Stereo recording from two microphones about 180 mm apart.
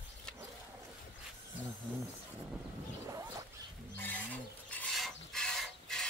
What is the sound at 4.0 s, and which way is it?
Filing, 10° left (ahead or behind).